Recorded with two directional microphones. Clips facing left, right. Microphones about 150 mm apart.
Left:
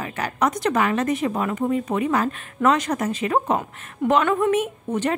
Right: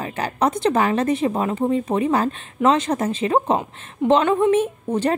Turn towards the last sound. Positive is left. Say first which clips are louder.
# right 3 dB
turn(degrees=-30)  # may be behind; listen again after turning